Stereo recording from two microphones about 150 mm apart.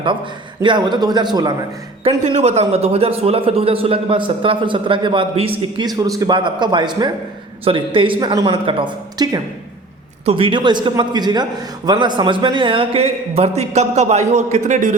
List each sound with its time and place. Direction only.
0.6 s a man's voice: 30° right (ahead or behind)
2.2 s a man's voice: 50° right (ahead or behind)